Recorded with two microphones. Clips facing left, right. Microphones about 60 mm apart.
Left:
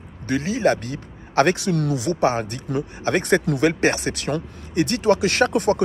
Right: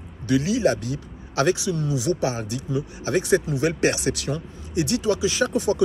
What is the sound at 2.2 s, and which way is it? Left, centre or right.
Speech, left.